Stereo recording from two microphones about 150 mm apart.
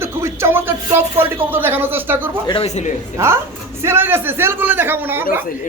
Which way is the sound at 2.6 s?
50° left (ahead or behind).